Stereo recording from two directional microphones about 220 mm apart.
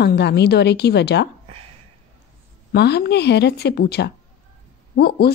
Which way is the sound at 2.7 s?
45° left (ahead or behind).